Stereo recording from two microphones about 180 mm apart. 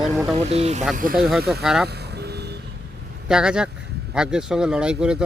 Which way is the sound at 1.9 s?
65° right (ahead or behind).